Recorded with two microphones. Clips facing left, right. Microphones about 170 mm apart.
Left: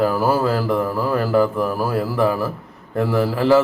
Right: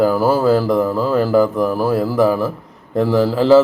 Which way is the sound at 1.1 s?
5° right (ahead or behind).